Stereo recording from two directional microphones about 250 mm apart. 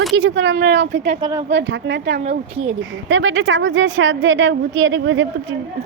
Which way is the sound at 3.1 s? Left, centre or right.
Right.